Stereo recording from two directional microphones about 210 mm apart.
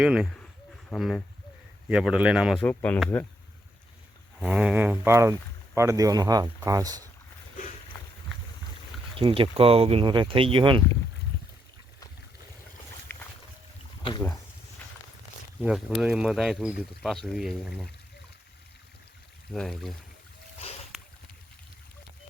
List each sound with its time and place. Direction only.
0.0 s speech: 5° right (ahead or behind)
4.4 s speech: 5° right (ahead or behind)
9.1 s speech: 25° right (ahead or behind)
13.1 s boat: 10° left (ahead or behind)
15.6 s speech: 5° right (ahead or behind)
19.5 s speech: centre (ahead or behind)
20.9 s a sound: centre (ahead or behind)